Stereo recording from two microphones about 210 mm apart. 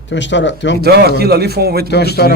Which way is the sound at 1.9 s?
50° left (ahead or behind).